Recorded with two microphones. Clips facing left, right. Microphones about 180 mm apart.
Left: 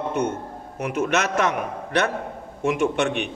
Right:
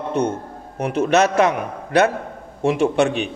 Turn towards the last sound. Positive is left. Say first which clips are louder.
# right 4 dB
turn(degrees=-35)  # may be behind; listen again after turning